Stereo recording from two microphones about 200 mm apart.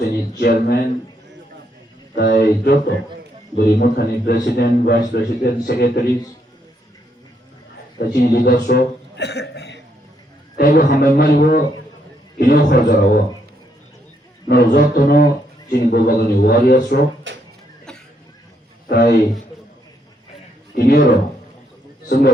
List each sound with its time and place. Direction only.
0.0 s speech: 55° left (ahead or behind)
2.1 s a man's voice: 50° left (ahead or behind)
7.9 s a sound: 55° left (ahead or behind)
10.6 s a man's voice: 50° left (ahead or behind)
14.4 s a man's voice: 55° left (ahead or behind)
18.9 s a man's voice: 50° left (ahead or behind)
20.7 s a man's voice: 50° left (ahead or behind)